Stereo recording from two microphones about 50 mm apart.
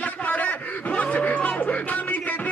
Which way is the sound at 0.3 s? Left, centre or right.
Left.